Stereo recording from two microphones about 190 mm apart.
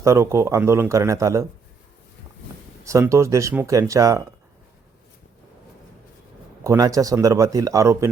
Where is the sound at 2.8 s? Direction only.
15° right (ahead or behind).